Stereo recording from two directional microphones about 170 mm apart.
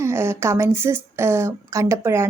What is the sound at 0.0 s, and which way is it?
A woman's voice, 15° right (ahead or behind).